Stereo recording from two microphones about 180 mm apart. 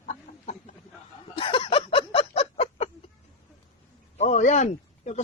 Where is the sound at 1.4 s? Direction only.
30° left (ahead or behind).